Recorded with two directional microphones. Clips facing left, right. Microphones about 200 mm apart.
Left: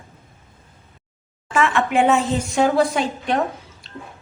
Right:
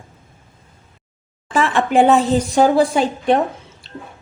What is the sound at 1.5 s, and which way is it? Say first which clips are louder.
Speech: right 3 dB; 35° right (ahead or behind).